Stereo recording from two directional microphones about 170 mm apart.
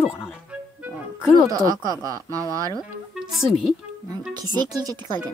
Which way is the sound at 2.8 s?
Centre (ahead or behind).